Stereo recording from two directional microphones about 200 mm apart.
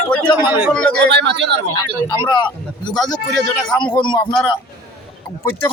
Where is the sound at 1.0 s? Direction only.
60° right (ahead or behind).